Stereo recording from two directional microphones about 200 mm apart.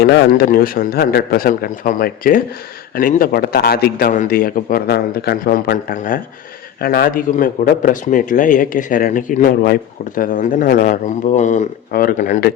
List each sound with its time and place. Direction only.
0.0 s a man's voice: 55° left (ahead or behind)